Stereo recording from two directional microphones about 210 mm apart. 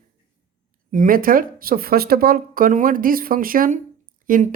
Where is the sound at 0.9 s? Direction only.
40° right (ahead or behind).